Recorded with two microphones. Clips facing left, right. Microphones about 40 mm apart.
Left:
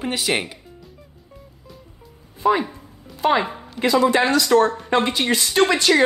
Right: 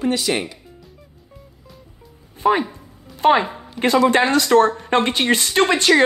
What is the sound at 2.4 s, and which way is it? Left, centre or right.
Speech, right.